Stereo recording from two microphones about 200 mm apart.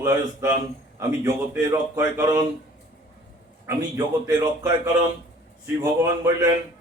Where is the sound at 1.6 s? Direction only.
15° right (ahead or behind).